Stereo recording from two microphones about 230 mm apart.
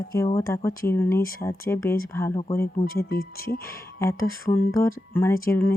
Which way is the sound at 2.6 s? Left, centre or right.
Left.